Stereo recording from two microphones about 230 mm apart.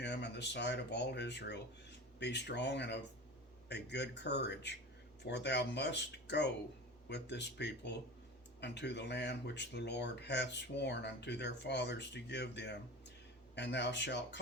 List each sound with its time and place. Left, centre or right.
0.0 s speech: left